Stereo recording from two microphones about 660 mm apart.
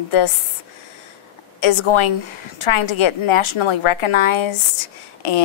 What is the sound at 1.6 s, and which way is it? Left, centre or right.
A woman's voice, left.